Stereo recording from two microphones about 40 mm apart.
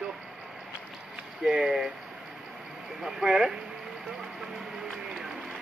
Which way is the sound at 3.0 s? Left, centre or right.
Centre.